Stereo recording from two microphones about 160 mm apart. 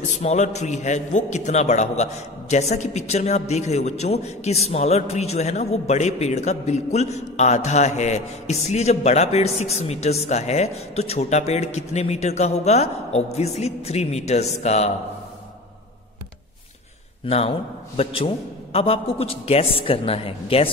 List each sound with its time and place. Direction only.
0.1 s a man's voice: 45° left (ahead or behind)
17.3 s a man's voice: 40° left (ahead or behind)